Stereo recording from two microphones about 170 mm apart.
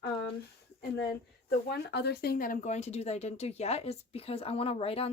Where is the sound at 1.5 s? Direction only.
70° left (ahead or behind); by 5.1 s 35° left (ahead or behind).